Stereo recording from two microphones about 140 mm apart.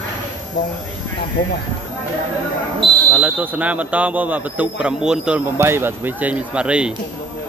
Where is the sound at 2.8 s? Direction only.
35° right (ahead or behind).